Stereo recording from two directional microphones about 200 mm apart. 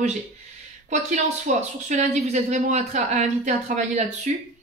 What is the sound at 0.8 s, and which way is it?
A woman's voice, 35° right (ahead or behind).